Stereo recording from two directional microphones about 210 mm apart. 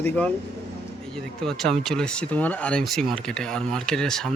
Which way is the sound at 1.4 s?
Centre (ahead or behind).